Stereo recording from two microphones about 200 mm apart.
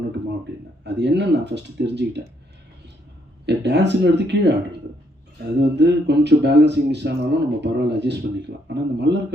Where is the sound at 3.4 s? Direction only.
60° right (ahead or behind).